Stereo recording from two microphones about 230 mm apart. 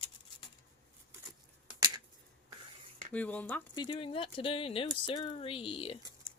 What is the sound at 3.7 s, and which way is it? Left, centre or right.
Speech, left.